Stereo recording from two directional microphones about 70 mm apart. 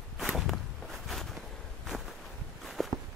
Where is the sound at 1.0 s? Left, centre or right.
Centre.